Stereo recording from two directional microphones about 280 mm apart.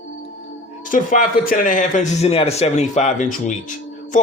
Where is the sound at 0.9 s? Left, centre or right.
Left.